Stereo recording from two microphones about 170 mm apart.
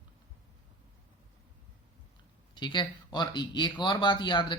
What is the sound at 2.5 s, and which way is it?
Speech, 25° left (ahead or behind).